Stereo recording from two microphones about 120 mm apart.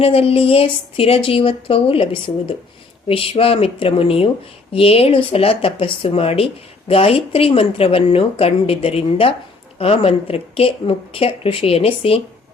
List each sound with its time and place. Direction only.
0.0 s speech: 55° left (ahead or behind)